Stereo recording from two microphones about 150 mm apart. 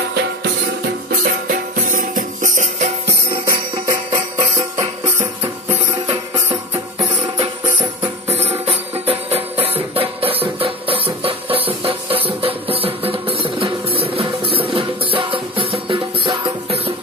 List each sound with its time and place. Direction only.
1.2 s music: 70° right (ahead or behind)
3.4 s music: 30° right (ahead or behind)
5.1 s music: 15° right (ahead or behind)
8.0 s music: 45° right (ahead or behind)